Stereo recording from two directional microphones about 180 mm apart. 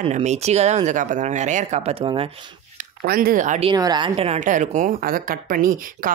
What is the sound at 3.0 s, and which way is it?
Speech, 55° right (ahead or behind).